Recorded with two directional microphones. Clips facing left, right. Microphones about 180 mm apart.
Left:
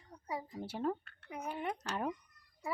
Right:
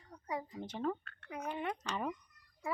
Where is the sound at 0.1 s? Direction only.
10° left (ahead or behind).